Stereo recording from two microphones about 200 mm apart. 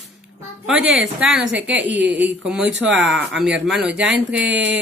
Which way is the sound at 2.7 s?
70° right (ahead or behind).